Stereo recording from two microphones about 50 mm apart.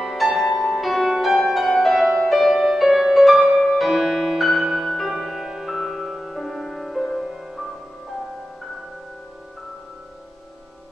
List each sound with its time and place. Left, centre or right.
0.0 s music: centre